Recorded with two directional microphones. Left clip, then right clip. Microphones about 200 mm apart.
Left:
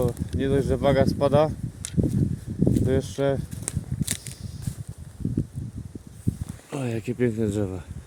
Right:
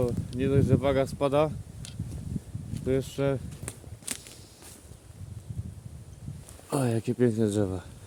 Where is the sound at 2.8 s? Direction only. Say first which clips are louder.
Even; centre (ahead or behind).